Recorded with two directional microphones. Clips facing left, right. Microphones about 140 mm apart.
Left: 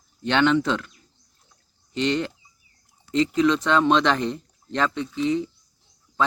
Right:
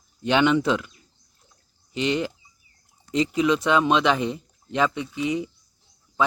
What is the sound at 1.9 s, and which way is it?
Speech, 10° right (ahead or behind).